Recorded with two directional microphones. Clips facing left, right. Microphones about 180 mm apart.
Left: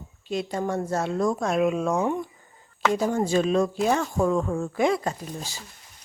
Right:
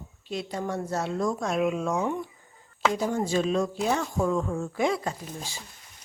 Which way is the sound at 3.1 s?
55° left (ahead or behind).